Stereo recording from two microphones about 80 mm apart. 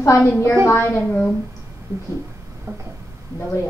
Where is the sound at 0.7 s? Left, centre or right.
Left.